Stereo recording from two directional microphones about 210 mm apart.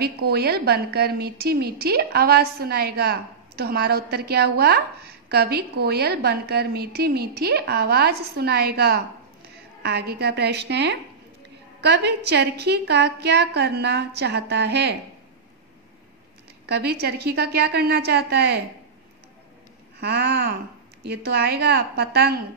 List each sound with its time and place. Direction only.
0.0 s a woman's voice: 50° right (ahead or behind)
16.6 s a woman's voice: 50° right (ahead or behind)
20.0 s a woman's voice: 50° right (ahead or behind)